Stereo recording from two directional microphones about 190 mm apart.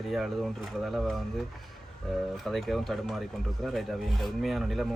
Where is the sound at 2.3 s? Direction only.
Centre (ahead or behind).